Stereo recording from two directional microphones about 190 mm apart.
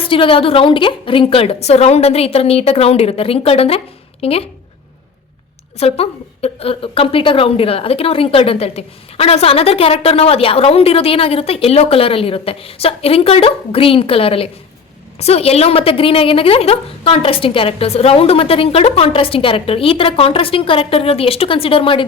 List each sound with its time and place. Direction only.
0.1 s a woman's voice: 30° left (ahead or behind)
5.7 s a woman's voice: 30° left (ahead or behind)